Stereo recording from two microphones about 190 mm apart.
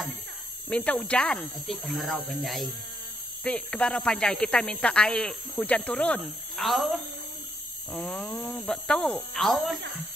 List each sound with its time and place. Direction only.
0.7 s speech: 10° left (ahead or behind)